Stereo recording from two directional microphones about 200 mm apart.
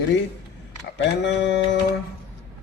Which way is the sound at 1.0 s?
60° left (ahead or behind).